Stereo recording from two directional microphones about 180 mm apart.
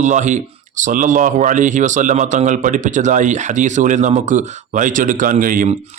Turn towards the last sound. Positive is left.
turn(degrees=-50)  # may be behind; listen again after turning